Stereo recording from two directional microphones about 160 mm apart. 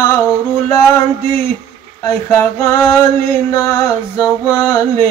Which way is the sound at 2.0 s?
15° left (ahead or behind).